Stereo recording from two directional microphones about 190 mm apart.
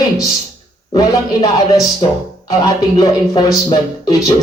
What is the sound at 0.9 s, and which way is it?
Speech, 20° left (ahead or behind).